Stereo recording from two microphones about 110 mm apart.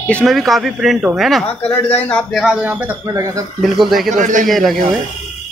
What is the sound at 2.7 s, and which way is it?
Speech, 20° right (ahead or behind).